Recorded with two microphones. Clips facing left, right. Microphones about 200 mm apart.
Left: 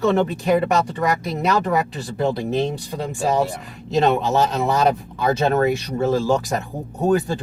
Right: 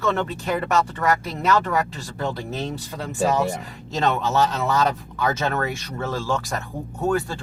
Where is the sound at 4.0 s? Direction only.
15° left (ahead or behind).